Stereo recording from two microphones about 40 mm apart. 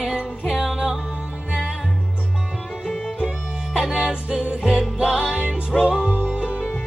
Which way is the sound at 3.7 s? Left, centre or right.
Centre.